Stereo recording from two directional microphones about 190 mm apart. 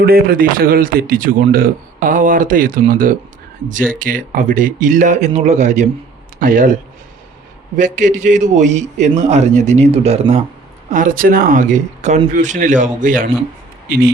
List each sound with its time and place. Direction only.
0.0 s a man's voice: 50° right (ahead or behind)
7.8 s a man's voice: 40° right (ahead or behind)
10.9 s speech: 45° right (ahead or behind)